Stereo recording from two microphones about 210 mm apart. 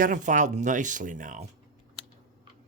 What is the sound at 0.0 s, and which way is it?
Speech, 40° right (ahead or behind).